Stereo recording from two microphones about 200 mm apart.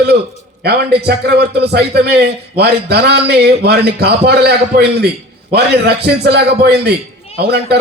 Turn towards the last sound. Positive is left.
turn(degrees=-55)  # may be behind; listen again after turning